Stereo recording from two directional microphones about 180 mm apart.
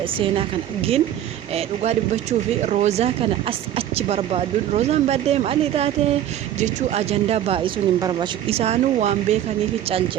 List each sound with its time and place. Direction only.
0.2 s speech: 30° right (ahead or behind)
8.4 s speech: 35° right (ahead or behind)